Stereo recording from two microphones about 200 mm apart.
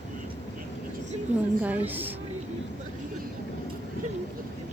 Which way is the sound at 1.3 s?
35° right (ahead or behind).